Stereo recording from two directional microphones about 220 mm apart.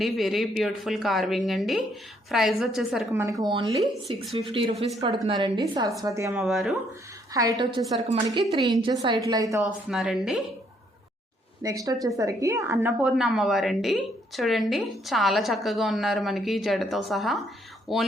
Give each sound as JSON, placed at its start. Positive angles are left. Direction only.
{"t": 0.0, "sound": "a woman's voice", "side_deg": 0}
{"t": 3.1, "sound": "a woman's voice", "side_deg": -15}
{"t": 6.4, "sound": "a woman's voice", "side_deg": 0}
{"t": 7.6, "sound": "a woman's voice", "side_deg": -20}
{"t": 9.9, "sound": "a woman's voice", "side_deg": 0}
{"t": 11.6, "sound": "a woman's voice", "side_deg": -15}